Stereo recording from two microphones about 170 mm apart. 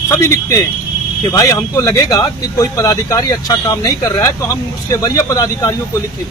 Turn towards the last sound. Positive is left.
turn(degrees=20)  # may be behind; listen again after turning